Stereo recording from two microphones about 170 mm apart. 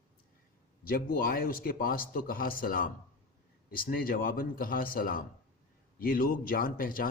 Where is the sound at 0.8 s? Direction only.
60° left (ahead or behind).